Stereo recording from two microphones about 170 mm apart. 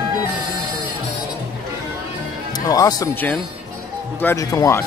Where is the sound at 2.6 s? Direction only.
20° left (ahead or behind).